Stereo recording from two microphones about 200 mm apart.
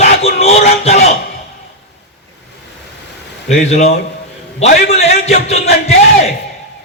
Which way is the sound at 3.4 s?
35° left (ahead or behind).